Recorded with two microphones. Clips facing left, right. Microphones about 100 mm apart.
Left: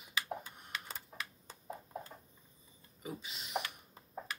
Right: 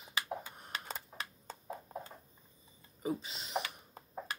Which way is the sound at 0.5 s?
35° right (ahead or behind).